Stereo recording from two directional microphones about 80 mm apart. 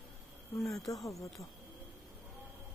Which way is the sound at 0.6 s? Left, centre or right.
Centre.